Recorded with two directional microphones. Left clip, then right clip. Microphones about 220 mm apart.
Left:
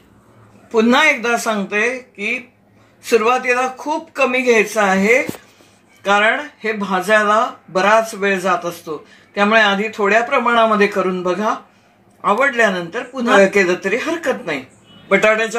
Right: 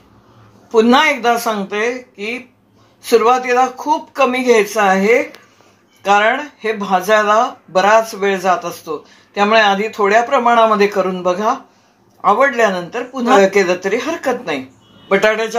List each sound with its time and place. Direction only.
0.7 s speech: 5° right (ahead or behind)